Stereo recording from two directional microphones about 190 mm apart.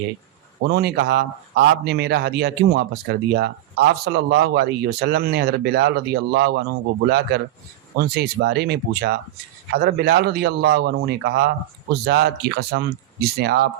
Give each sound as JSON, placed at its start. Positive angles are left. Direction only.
{"t": 0.6, "sound": "a man's voice", "side_deg": -55}